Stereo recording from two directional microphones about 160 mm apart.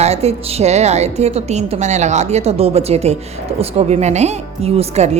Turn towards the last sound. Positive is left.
turn(degrees=-40)  # may be behind; listen again after turning